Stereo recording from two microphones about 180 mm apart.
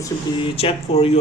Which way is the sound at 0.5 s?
35° left (ahead or behind).